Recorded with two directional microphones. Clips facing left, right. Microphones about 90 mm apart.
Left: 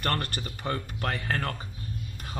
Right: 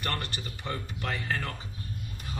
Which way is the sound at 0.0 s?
50° left (ahead or behind).